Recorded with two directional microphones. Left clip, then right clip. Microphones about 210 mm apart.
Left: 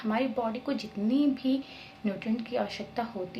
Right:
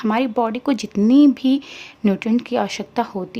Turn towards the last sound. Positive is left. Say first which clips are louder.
# right 11 dB
turn(degrees=-45)  # may be behind; listen again after turning